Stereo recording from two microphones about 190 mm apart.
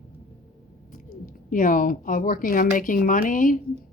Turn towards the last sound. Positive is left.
turn(degrees=45)  # may be behind; listen again after turning